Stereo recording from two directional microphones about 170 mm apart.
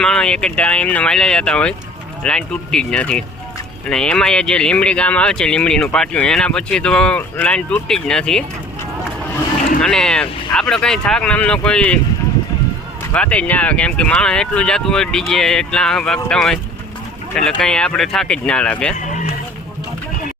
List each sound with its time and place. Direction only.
0.0 s speech: 5° left (ahead or behind)
9.8 s speech: 5° left (ahead or behind)
13.1 s speech: 5° left (ahead or behind)
18.9 s a sound: 45° left (ahead or behind)